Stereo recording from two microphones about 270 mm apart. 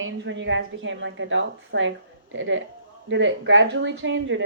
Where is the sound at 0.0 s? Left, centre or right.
Right.